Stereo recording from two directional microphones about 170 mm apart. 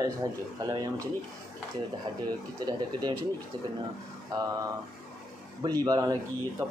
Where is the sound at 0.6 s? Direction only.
25° right (ahead or behind).